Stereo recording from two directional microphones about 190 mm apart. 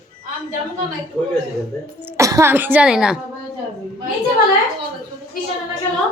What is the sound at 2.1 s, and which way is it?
A woman's voice, 15° right (ahead or behind).